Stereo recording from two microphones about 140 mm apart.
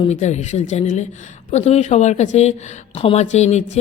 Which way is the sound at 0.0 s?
55° left (ahead or behind).